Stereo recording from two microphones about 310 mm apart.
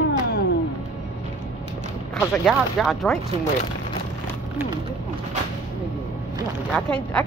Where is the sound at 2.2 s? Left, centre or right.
Centre.